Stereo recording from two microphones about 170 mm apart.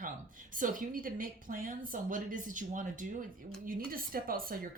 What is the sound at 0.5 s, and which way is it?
A woman's voice, 55° right (ahead or behind).